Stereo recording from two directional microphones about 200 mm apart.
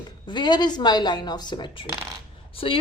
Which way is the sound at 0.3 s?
20° left (ahead or behind).